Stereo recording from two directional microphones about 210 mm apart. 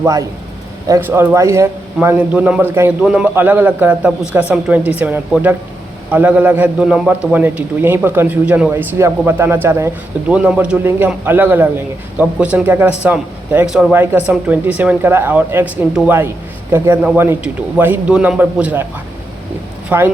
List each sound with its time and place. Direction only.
0.0 s speech: 15° right (ahead or behind)
19.9 s speech: 10° right (ahead or behind)